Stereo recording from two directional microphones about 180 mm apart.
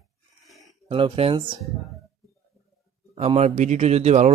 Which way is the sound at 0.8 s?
30° right (ahead or behind).